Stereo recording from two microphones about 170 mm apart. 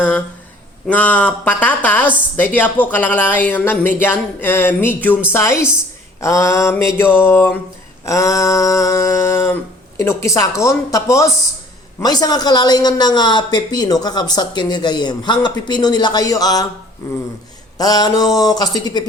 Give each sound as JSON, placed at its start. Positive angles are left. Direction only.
{"t": 0.9, "sound": "a man's voice", "side_deg": 10}
{"t": 17.7, "sound": "a man's voice", "side_deg": 20}